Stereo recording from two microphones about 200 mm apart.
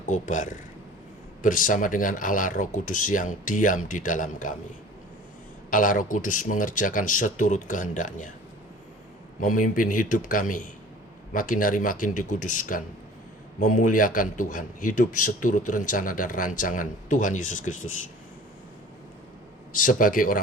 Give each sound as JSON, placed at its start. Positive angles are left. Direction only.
{"t": 0.1, "sound": "a man's voice", "side_deg": 40}
{"t": 5.7, "sound": "a man's voice", "side_deg": 40}
{"t": 9.4, "sound": "a man's voice", "side_deg": 40}
{"t": 19.7, "sound": "speech", "side_deg": 40}